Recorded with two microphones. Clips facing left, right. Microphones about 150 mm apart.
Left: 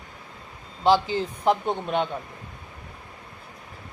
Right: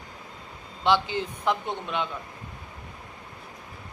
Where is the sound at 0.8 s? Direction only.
35° left (ahead or behind).